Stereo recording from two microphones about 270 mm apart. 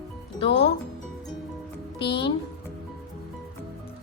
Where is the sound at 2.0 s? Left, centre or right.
Centre.